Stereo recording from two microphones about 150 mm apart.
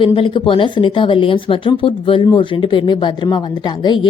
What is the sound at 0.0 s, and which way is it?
A woman's voice, 35° left (ahead or behind).